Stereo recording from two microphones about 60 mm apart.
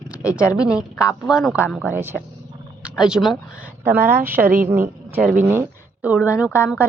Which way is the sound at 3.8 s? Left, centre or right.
Right.